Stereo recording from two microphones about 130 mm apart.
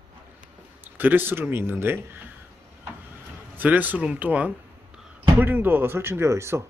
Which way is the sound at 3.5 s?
10° right (ahead or behind).